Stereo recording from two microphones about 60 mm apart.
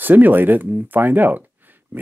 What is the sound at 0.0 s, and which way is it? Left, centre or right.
Speech, right.